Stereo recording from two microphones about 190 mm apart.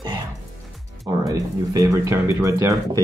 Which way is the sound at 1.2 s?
20° right (ahead or behind).